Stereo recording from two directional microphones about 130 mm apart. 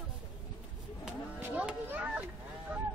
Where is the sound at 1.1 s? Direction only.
10° right (ahead or behind).